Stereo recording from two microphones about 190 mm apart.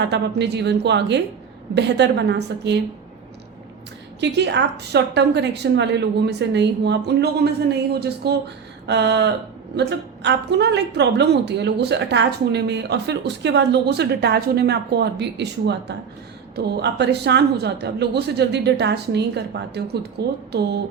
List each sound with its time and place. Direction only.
0.0 s a woman's voice: 65° right (ahead or behind)
4.2 s a woman's voice: 65° right (ahead or behind)